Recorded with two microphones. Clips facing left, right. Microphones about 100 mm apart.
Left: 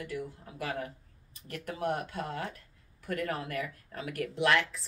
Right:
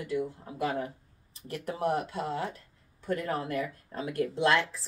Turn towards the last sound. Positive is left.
turn(degrees=-25)  # may be behind; listen again after turning